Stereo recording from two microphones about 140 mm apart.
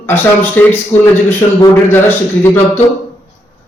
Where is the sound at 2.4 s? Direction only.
15° left (ahead or behind).